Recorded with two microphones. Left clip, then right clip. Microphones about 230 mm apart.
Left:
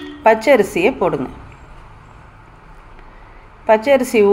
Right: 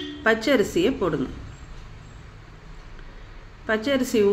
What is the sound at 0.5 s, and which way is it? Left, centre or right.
Speech, left.